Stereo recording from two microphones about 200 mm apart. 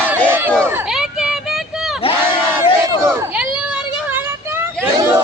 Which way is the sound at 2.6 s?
15° right (ahead or behind).